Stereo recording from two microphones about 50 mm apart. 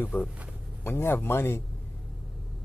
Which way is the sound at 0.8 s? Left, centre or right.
Left.